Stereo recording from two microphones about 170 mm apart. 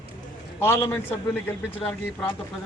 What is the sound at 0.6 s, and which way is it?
Speech, 15° left (ahead or behind).